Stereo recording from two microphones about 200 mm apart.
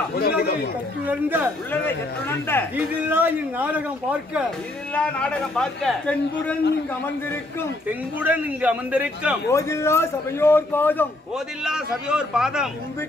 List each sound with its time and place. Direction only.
0.2 s chatter: 50° left (ahead or behind)
1.0 s a man's voice: 10° right (ahead or behind)
1.7 s a man's voice: 10° left (ahead or behind)
2.7 s a man's voice: 10° right (ahead or behind)
4.9 s speech: 5° left (ahead or behind)
8.2 s a man's voice: 5° right (ahead or behind)
9.5 s a man's voice: 15° left (ahead or behind)
11.3 s speech: 5° right (ahead or behind)